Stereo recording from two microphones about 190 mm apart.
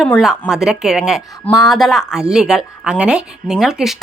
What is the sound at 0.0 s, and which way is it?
A woman's voice, centre (ahead or behind).